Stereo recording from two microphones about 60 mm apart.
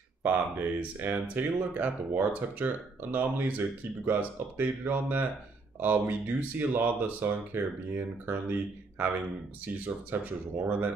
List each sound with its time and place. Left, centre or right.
0.2 s speech: right
10.1 s speech: right